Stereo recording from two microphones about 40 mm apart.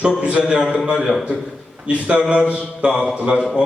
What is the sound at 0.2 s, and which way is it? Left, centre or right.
Speech, right.